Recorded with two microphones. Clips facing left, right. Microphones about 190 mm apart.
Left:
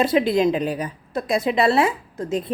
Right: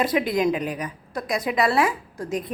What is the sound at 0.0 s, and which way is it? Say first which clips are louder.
A woman's voice: left 4 dB; 30° left (ahead or behind).